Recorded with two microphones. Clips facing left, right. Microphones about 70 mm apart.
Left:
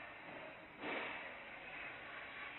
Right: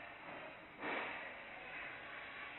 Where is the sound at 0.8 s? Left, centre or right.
Right.